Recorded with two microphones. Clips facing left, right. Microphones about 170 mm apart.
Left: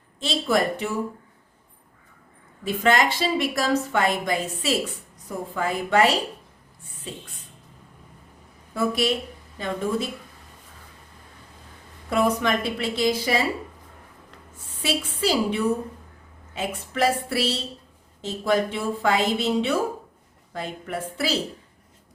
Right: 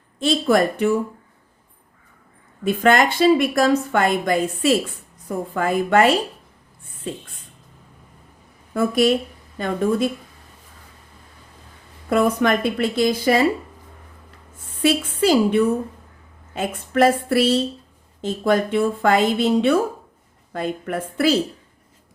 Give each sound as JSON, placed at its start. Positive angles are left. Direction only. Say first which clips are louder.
{"t": 0.2, "sound": "a woman's voice", "louder": "right 5 dB", "side_deg": -55}
{"t": 2.6, "sound": "a woman's voice", "louder": "right 4 dB", "side_deg": -55}
{"t": 8.7, "sound": "a woman's voice", "louder": "right 6 dB", "side_deg": -50}
{"t": 12.1, "sound": "a woman's voice", "louder": "right 4 dB", "side_deg": -55}
{"t": 14.8, "sound": "a woman's voice", "louder": "right 7 dB", "side_deg": -50}